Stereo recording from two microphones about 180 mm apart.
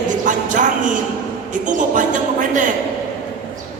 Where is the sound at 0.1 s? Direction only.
45° right (ahead or behind).